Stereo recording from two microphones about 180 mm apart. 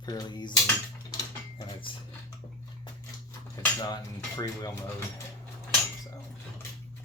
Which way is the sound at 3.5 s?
20° left (ahead or behind).